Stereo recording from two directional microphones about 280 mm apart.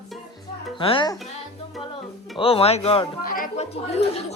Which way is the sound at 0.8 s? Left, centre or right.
Centre.